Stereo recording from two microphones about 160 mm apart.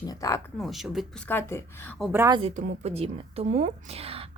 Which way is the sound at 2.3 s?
35° right (ahead or behind).